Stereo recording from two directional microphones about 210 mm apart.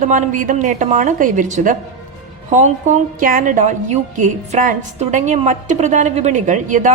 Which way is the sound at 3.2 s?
40° right (ahead or behind).